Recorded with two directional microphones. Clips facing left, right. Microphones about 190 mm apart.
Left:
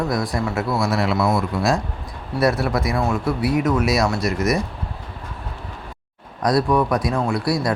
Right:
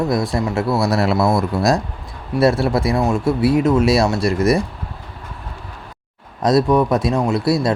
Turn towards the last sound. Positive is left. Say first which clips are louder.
# right 4 dB
turn(degrees=-25)  # may be behind; listen again after turning